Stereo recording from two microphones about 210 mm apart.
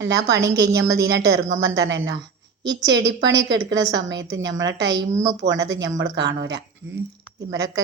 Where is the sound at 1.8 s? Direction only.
55° right (ahead or behind).